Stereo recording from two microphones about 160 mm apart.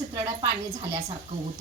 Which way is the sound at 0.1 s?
25° right (ahead or behind).